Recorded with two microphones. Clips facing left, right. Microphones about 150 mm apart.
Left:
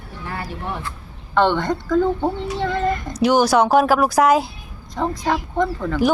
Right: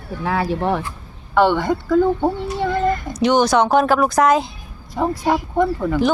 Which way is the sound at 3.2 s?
5° left (ahead or behind).